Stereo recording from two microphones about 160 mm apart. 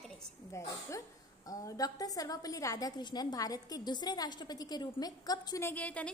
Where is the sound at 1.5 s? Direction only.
20° left (ahead or behind).